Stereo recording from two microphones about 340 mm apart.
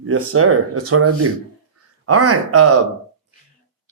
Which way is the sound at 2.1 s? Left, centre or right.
Right.